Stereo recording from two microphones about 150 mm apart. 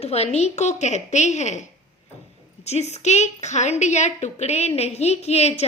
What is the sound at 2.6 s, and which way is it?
A woman's voice, 45° left (ahead or behind).